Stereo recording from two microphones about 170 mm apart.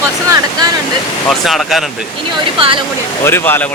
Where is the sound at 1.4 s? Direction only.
Centre (ahead or behind).